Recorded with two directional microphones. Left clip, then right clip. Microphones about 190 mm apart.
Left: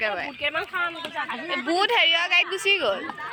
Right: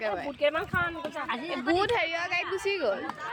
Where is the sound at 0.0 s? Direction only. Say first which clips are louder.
Left 5 dB; centre (ahead or behind).